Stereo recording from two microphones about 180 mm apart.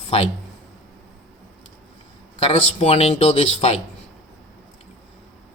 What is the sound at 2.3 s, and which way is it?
Speech, 35° left (ahead or behind).